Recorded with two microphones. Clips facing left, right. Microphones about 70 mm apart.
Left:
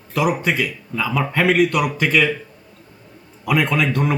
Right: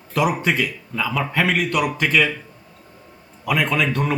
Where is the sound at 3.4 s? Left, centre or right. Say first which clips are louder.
Left 2 dB; centre.